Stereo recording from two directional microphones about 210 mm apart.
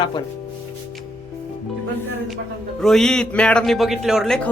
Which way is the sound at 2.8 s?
Centre (ahead or behind).